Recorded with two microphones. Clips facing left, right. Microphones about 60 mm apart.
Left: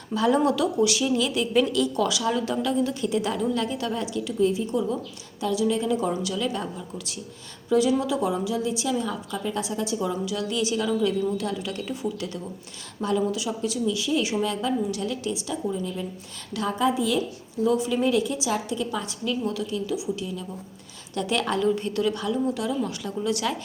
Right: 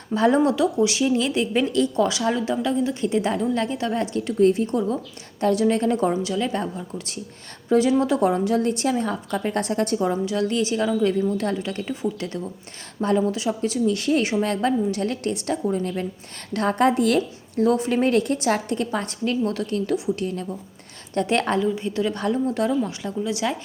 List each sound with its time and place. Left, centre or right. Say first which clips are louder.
0.1 s a woman's voice: right 3 dB; right
21.2 s a woman's voice: right 4 dB; right
21.6 s speech: even; centre
22.1 s a woman's voice: right 3 dB; right
22.8 s speech: right 2 dB; right